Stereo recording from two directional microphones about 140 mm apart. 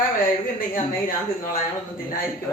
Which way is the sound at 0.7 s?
85° left.